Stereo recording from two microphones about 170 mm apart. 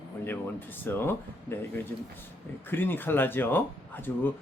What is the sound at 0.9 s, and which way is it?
A woman's voice, 15° left (ahead or behind).